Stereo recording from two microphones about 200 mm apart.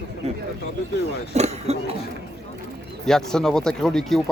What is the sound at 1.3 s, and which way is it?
Speech, 35° right (ahead or behind).